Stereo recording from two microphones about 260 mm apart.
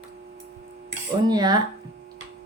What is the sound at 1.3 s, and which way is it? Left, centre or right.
Speech, centre.